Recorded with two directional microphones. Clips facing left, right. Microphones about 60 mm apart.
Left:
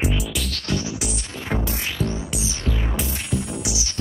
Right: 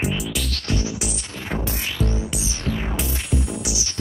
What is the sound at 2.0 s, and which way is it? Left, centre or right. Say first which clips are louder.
Music: right 2 dB; left.